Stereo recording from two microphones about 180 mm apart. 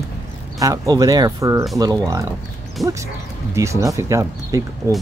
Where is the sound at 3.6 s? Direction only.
15° right (ahead or behind).